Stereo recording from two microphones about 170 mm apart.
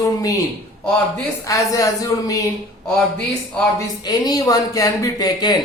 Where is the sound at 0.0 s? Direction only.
20° left (ahead or behind).